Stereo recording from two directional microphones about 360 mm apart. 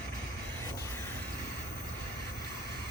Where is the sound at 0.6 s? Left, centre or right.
Centre.